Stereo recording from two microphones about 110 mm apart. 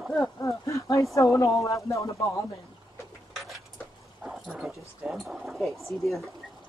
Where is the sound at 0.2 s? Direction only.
30° left (ahead or behind).